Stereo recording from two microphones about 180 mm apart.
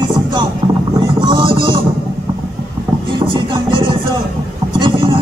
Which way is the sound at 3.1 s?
25° right (ahead or behind).